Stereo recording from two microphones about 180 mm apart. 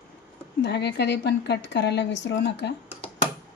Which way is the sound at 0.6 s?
70° left (ahead or behind).